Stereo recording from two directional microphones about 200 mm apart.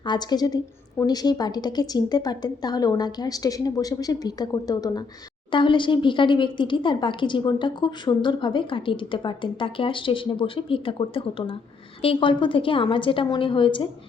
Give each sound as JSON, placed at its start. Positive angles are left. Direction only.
{"t": 0.0, "sound": "speech", "side_deg": 20}